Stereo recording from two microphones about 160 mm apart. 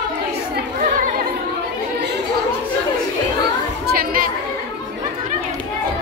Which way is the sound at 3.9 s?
65° right (ahead or behind).